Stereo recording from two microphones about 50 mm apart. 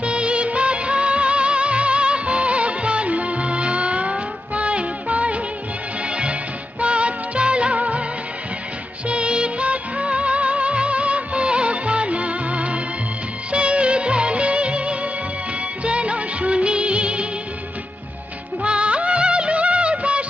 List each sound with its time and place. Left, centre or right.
0.0 s music of bollywood: right
6.1 s music: right
6.7 s music of bollywood: right
9.0 s music: right
13.5 s music of bollywood: right
18.6 s music of bollywood: right